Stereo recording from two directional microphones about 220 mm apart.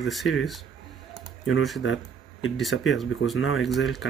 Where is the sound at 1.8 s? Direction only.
60° left (ahead or behind).